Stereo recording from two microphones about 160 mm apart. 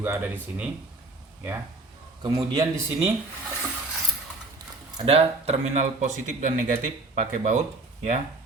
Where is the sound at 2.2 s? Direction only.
25° right (ahead or behind).